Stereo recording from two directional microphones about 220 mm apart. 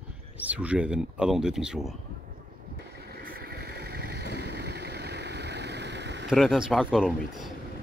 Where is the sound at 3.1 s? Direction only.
45° right (ahead or behind).